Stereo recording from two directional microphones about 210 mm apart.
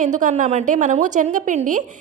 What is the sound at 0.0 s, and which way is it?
A woman's voice, 35° right (ahead or behind).